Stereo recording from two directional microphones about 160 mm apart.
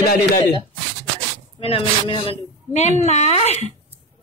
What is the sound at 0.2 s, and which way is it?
A woman's voice, 30° left (ahead or behind).